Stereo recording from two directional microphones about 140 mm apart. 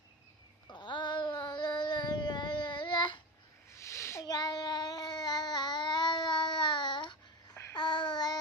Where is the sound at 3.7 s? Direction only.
20° left (ahead or behind).